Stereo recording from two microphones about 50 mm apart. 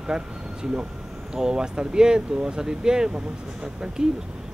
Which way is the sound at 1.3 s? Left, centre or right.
Centre.